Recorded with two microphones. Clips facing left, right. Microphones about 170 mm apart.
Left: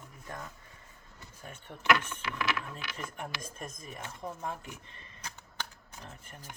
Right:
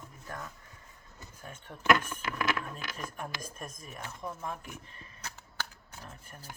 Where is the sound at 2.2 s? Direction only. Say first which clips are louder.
Right 2 dB; 45° right (ahead or behind).